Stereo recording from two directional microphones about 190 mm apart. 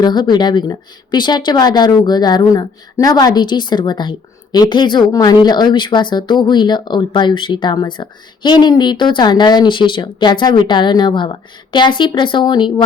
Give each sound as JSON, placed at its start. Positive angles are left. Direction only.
{"t": 0.0, "sound": "speech", "side_deg": 20}